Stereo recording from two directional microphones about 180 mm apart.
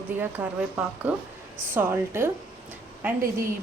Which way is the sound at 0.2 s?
10° right (ahead or behind).